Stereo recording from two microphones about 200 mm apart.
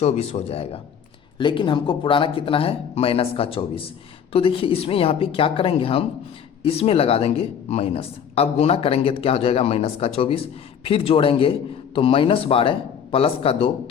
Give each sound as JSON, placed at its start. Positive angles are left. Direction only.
{"t": 0.0, "sound": "speech", "side_deg": 30}